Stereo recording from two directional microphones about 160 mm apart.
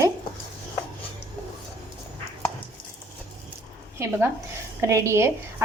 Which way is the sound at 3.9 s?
15° right (ahead or behind).